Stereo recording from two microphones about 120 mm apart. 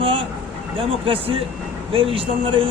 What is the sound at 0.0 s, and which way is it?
Vehicle, 45° right (ahead or behind).